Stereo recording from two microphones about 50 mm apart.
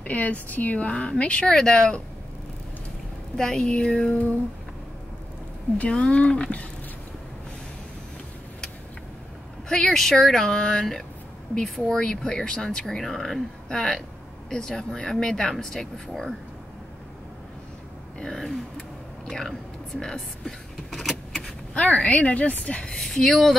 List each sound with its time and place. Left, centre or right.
0.0 s speech: left
1.5 s speech: centre
3.3 s speech: centre
5.8 s speech: left
9.9 s speech: centre
18.2 s speech: centre
18.8 s a sound: centre
20.0 s speech: centre
21.3 s vehicle: centre
21.8 s speech: left; by 23.5 s centre